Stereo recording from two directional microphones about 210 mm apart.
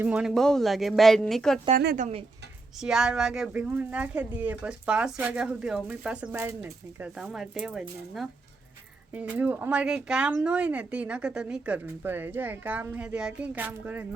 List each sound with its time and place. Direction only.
0.0 s speech: 5° right (ahead or behind)
2.0 s speech: 30° right (ahead or behind)
2.7 s speech: centre (ahead or behind)